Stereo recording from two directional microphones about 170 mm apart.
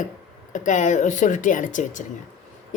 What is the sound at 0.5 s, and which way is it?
Speech, 50° left (ahead or behind).